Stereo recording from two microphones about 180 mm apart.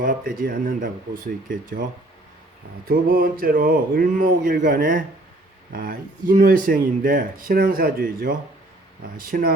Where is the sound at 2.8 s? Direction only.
55° right (ahead or behind).